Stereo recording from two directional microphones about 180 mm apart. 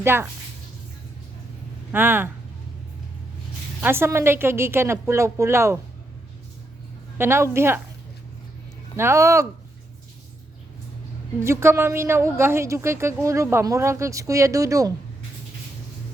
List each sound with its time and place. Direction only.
0.0 s a woman's voice: 15° right (ahead or behind)
1.9 s a woman's voice: 10° right (ahead or behind)
3.8 s a woman's voice: 10° right (ahead or behind)
7.2 s a woman's voice: 15° right (ahead or behind)
9.0 s a woman's voice: 15° right (ahead or behind)
11.4 s a woman's voice: 15° right (ahead or behind)